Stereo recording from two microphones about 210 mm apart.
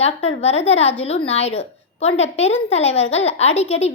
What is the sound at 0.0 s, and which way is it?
A woman's voice, 30° left (ahead or behind).